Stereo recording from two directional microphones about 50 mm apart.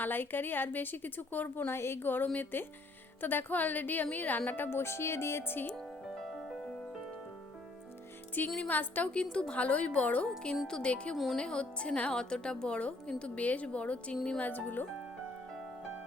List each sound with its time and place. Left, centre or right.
0.0 s a woman's voice: left
4.8 s speech: left
6.1 s music: centre
8.4 s a woman's voice: left
8.7 s a woman's voice: left
9.1 s a woman's voice: left
10.2 s a woman's voice: centre
14.4 s a woman's voice: left